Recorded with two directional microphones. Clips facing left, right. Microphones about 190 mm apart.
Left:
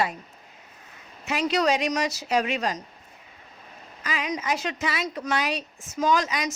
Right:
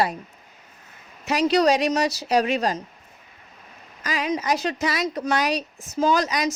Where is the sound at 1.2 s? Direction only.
40° right (ahead or behind).